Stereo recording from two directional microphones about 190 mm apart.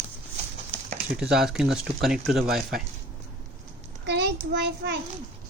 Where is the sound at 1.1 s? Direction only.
5° right (ahead or behind).